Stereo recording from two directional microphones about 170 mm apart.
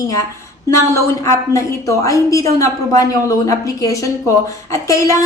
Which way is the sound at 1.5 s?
15° left (ahead or behind).